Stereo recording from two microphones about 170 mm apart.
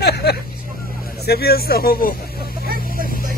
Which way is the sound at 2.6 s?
60° right (ahead or behind).